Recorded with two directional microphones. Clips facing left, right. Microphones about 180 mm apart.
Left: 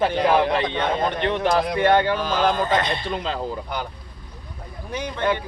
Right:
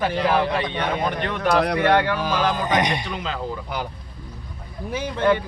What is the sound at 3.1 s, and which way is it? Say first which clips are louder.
Speech: left 2 dB; 35° left (ahead or behind).